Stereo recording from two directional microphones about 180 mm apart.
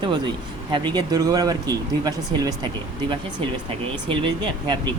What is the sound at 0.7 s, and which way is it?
Speech, 25° right (ahead or behind).